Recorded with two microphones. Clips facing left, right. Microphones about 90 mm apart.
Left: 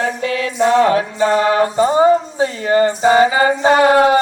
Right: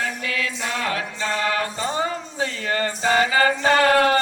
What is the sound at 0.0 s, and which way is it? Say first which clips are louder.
Music: left 7 dB; 30° left (ahead or behind).